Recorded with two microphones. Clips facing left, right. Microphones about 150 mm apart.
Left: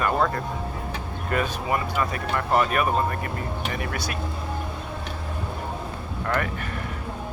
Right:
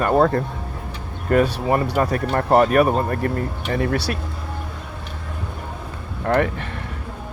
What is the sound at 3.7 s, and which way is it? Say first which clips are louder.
Speech: right 8 dB; 30° right (ahead or behind).